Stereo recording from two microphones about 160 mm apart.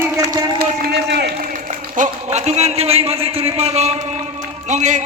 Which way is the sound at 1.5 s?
55° right (ahead or behind).